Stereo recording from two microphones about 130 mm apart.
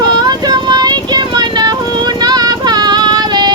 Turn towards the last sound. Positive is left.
turn(degrees=-35)  # may be behind; listen again after turning